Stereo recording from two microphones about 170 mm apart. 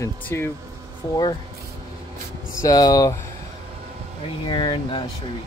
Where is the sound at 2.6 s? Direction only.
20° left (ahead or behind).